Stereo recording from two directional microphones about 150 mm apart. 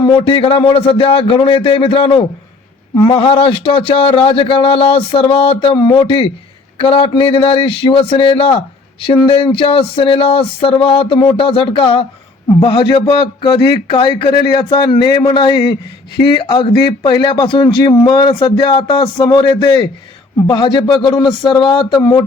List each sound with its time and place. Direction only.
0.0 s a man's voice: 35° left (ahead or behind)